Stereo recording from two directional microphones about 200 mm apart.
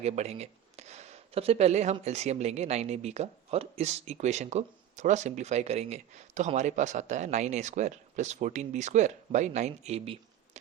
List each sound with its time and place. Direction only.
0.0 s speech: 35° right (ahead or behind)